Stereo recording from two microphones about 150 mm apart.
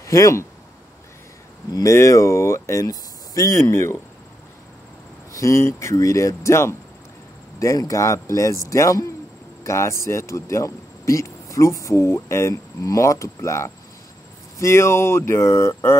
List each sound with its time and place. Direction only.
0.0 s speech: 20° left (ahead or behind)
1.7 s speech: 20° left (ahead or behind)
5.3 s speech: 20° left (ahead or behind)